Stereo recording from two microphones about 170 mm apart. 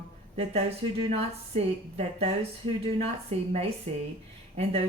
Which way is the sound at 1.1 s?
35° right (ahead or behind).